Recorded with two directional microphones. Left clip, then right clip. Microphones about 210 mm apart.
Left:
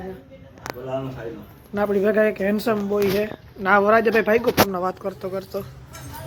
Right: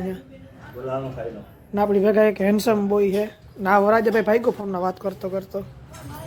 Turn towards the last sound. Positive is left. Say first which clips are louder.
# right 1 dB
turn(degrees=-10)  # may be behind; listen again after turning